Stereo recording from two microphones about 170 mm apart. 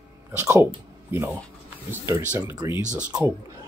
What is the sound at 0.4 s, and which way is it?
Speech, 15° right (ahead or behind).